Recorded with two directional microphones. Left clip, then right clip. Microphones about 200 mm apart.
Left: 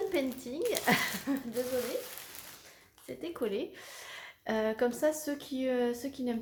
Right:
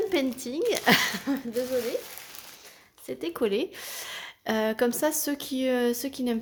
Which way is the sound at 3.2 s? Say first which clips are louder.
Right 8 dB; 50° right (ahead or behind).